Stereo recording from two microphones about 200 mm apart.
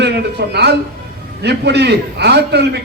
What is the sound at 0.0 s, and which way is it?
A man's voice, 55° right (ahead or behind).